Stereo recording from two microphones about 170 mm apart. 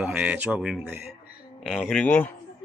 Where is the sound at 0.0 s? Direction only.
5° right (ahead or behind).